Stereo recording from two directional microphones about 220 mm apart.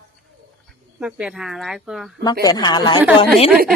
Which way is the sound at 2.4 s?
20° left (ahead or behind).